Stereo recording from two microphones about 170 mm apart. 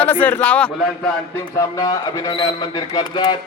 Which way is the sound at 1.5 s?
20° left (ahead or behind).